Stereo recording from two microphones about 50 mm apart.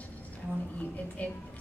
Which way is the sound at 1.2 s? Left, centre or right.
Left.